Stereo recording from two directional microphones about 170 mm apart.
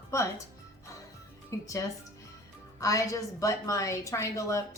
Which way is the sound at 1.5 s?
20° left (ahead or behind).